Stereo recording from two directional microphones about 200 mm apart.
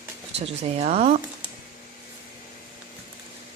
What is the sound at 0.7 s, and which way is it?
Speech, 30° right (ahead or behind).